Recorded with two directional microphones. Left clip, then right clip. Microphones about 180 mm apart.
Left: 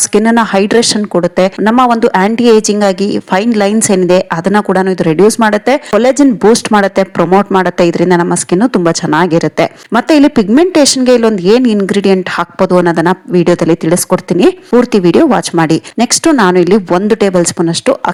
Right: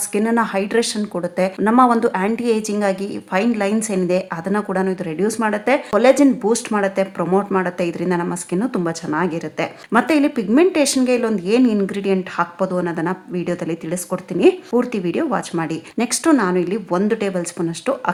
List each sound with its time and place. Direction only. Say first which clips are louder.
0.1 s a woman's voice: left 8 dB; 40° left (ahead or behind)